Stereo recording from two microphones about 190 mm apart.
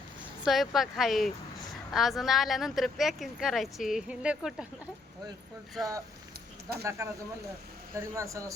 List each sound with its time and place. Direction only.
0.4 s speech: centre (ahead or behind)
5.8 s speech: centre (ahead or behind)
6.8 s speech: 15° right (ahead or behind)